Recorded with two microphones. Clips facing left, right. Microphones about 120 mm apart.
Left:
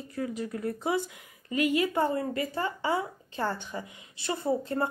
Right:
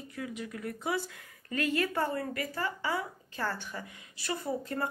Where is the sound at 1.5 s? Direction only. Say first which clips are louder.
Left 4 dB; 15° left (ahead or behind).